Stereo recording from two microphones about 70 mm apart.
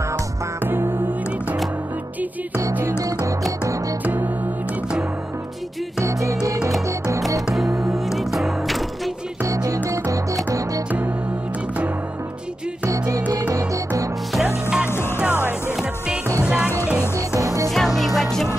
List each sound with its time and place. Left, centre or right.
0.7 s music: right
6.0 s music: right
7.5 s music: centre
9.4 s music: right
12.8 s music: right
14.3 s music: centre
17.7 s music: centre